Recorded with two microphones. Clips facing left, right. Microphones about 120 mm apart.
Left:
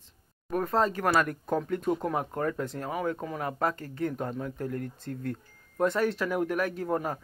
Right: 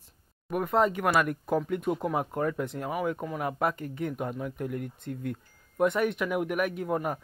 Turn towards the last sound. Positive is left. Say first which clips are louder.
# even
turn(degrees=-15)  # may be behind; listen again after turning